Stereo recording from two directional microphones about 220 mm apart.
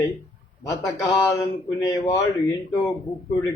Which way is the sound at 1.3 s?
15° left (ahead or behind).